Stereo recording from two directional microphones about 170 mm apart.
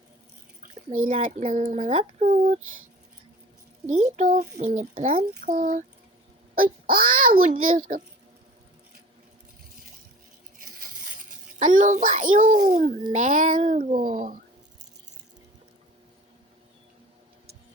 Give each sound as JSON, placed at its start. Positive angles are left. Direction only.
{"t": 0.6, "sound": "a child's voice", "side_deg": -45}
{"t": 1.5, "sound": "a child's voice", "side_deg": -45}
{"t": 2.1, "sound": "a child's voice", "side_deg": -50}
{"t": 3.8, "sound": "a child's voice", "side_deg": -45}
{"t": 10.6, "sound": "a sound", "side_deg": -55}
{"t": 13.1, "sound": "a child's voice", "side_deg": -50}